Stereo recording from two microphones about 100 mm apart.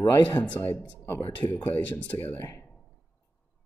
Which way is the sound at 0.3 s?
20° left (ahead or behind).